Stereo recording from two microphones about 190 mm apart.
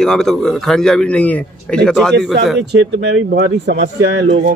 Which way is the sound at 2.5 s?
65° right (ahead or behind).